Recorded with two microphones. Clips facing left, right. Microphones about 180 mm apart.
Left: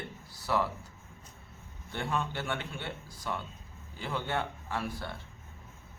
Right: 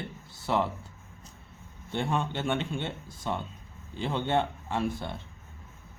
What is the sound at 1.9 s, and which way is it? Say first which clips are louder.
A man's voice: right 4 dB; 25° right (ahead or behind).